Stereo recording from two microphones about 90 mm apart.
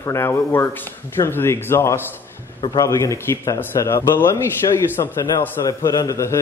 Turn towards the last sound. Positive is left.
turn(degrees=35)  # may be behind; listen again after turning